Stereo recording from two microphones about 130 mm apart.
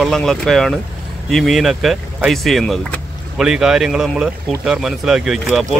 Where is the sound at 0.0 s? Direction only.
5° left (ahead or behind).